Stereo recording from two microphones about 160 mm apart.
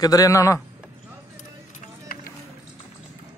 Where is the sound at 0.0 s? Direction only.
20° left (ahead or behind).